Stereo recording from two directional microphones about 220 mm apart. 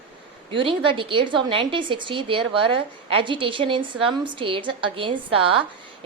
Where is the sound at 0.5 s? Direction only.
25° right (ahead or behind).